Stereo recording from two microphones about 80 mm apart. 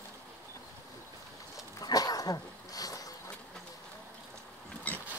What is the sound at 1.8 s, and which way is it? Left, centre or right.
Dog, left.